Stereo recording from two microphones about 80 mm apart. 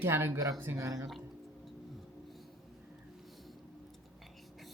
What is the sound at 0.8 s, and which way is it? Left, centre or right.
Speech, right.